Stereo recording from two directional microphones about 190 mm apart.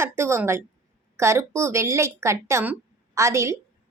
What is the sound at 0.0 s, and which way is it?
A woman's voice, 15° right (ahead or behind).